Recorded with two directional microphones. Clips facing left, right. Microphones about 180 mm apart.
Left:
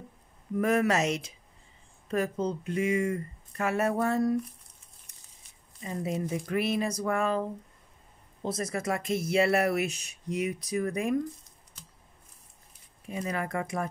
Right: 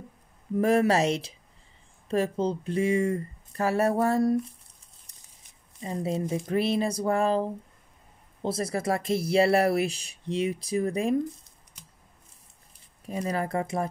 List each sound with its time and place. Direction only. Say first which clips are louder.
0.6 s speech: right 3 dB; 30° right (ahead or behind)
5.1 s a sound: even; 35° right (ahead or behind)
5.8 s speech: right 3 dB; 30° right (ahead or behind)
13.0 s speech: right 3 dB; 35° right (ahead or behind)